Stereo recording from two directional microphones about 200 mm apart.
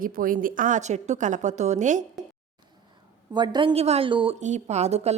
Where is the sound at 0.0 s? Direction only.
45° right (ahead or behind).